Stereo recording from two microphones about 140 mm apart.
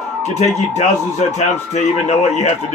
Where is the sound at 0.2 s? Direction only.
55° left (ahead or behind).